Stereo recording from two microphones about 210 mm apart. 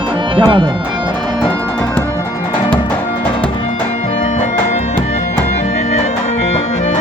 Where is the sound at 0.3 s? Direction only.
25° right (ahead or behind).